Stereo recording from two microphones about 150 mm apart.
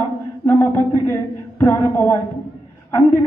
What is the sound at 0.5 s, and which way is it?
A woman's voice, 15° left (ahead or behind).